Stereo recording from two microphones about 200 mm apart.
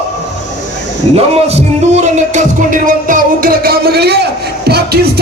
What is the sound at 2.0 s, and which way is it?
Music, 40° right (ahead or behind).